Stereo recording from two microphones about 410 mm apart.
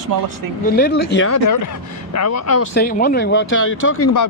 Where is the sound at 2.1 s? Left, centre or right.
Left.